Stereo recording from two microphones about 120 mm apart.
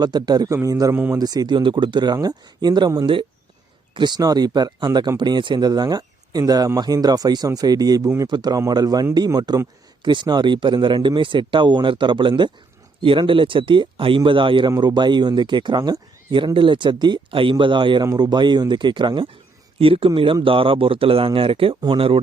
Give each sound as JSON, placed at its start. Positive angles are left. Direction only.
{"t": 0.0, "sound": "a man's voice", "side_deg": -35}
{"t": 0.9, "sound": "speech", "side_deg": -15}
{"t": 1.2, "sound": "speech", "side_deg": -35}
{"t": 3.9, "sound": "speech", "side_deg": -35}
{"t": 18.0, "sound": "speech", "side_deg": -30}